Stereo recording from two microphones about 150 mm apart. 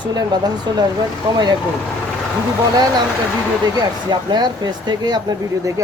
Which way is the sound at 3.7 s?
30° right (ahead or behind).